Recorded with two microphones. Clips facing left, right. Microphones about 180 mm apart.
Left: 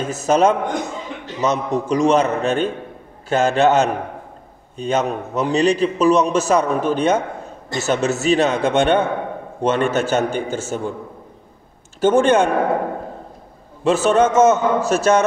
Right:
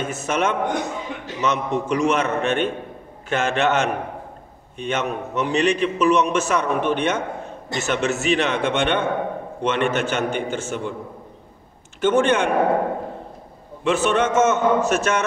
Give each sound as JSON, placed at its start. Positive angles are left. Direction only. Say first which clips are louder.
{"t": 0.0, "sound": "a man's voice", "louder": "left 7 dB", "side_deg": 35}
{"t": 12.0, "sound": "a man's voice", "louder": "left 4 dB", "side_deg": 40}
{"t": 13.8, "sound": "a man's voice", "louder": "left 4 dB", "side_deg": 40}